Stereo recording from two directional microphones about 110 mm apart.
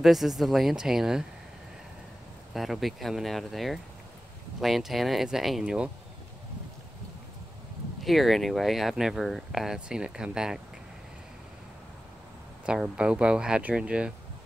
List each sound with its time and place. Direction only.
0.0 s speech: 5° right (ahead or behind)
2.5 s speech: centre (ahead or behind)
8.0 s speech: centre (ahead or behind)
12.6 s speech: 10° right (ahead or behind)